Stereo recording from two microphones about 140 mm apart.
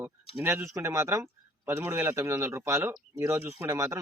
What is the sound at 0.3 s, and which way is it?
Speech, 15° right (ahead or behind).